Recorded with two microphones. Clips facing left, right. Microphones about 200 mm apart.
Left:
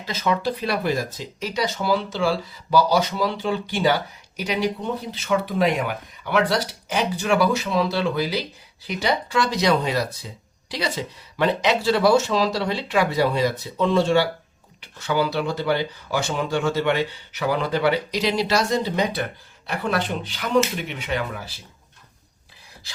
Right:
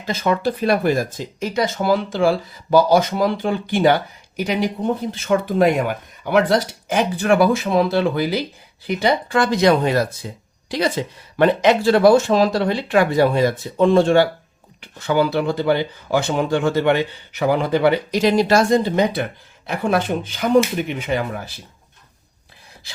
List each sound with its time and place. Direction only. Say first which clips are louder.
0.0 s speech: right 4 dB; 50° right (ahead or behind)